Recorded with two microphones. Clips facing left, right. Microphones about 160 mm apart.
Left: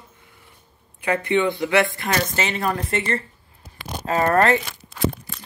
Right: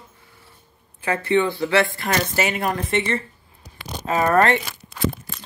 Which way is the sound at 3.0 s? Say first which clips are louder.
Right 1 dB; 45° left (ahead or behind).